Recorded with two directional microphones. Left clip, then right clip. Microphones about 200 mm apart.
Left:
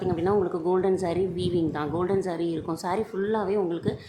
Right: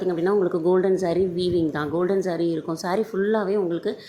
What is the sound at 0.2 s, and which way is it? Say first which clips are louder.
Speech: right 3 dB; 15° right (ahead or behind).